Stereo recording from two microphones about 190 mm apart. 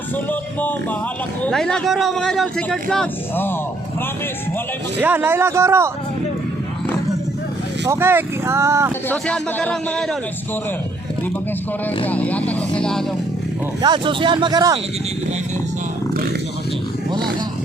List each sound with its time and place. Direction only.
0.3 s speech: 10° left (ahead or behind)
4.9 s speech: 10° right (ahead or behind)
7.9 s speech: 10° right (ahead or behind)
9.0 s speech: 5° left (ahead or behind)
12.0 s speech: 10° left (ahead or behind)
13.8 s speech: 25° right (ahead or behind)